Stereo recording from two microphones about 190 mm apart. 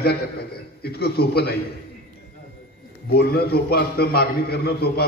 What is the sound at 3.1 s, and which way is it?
A man's voice, 55° left (ahead or behind).